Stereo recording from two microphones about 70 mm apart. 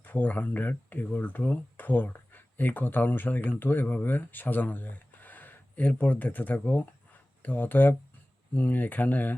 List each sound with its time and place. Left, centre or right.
0.0 s speech: left